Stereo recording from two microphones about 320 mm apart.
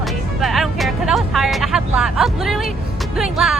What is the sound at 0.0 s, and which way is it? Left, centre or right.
Music, centre.